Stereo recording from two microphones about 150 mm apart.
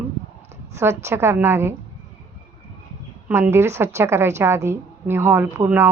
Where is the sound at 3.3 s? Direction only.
15° right (ahead or behind).